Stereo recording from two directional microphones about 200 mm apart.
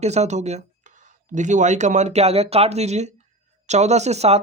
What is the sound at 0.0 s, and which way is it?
Speech, 35° right (ahead or behind).